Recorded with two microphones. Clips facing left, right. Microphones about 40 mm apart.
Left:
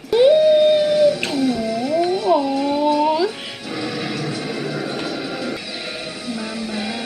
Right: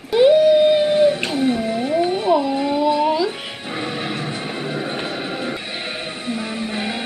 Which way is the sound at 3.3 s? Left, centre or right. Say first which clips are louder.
Right 1 dB; right.